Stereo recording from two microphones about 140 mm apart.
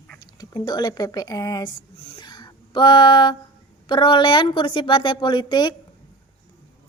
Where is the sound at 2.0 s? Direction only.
40° left (ahead or behind).